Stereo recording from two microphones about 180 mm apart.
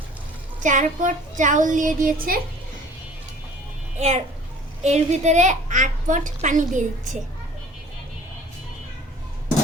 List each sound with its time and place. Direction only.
0.6 s a woman's voice: 45° right (ahead or behind)
3.9 s a child's voice: 40° right (ahead or behind)